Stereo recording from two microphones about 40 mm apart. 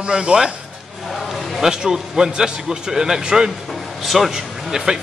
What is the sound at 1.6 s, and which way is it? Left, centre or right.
A man's voice, centre.